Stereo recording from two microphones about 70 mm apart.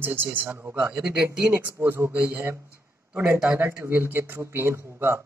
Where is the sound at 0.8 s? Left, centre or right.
Centre.